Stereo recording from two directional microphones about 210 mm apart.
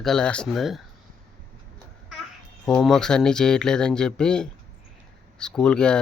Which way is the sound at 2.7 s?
5° left (ahead or behind).